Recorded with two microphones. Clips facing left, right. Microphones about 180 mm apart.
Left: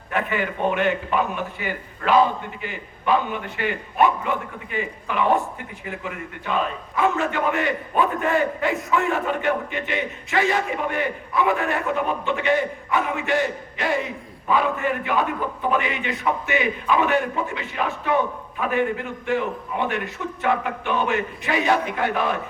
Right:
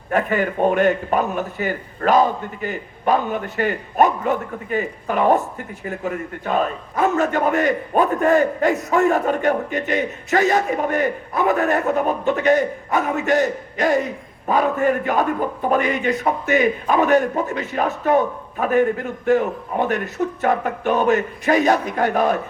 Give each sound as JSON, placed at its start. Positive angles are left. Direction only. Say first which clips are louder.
{"t": 0.1, "sound": "a man's voice", "louder": "right 5 dB", "side_deg": -45}